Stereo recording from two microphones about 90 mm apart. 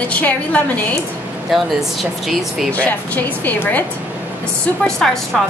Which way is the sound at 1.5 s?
Centre (ahead or behind).